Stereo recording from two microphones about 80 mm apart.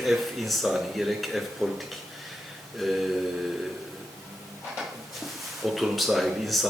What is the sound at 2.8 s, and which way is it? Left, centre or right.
Speech, centre.